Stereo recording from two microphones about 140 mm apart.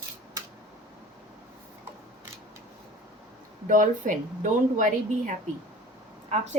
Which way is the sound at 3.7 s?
65° right (ahead or behind).